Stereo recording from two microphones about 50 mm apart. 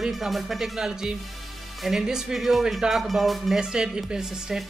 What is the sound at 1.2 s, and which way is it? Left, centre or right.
Speech, centre.